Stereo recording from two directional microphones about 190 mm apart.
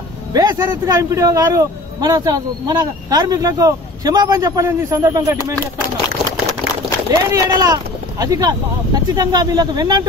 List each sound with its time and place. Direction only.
0.3 s speech: 20° right (ahead or behind)
7.1 s speech: 15° right (ahead or behind)